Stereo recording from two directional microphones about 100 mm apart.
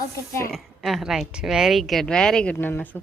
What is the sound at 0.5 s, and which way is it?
Speech, centre (ahead or behind).